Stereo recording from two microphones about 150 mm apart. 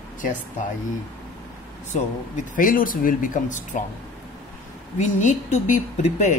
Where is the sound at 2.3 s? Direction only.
65° left (ahead or behind).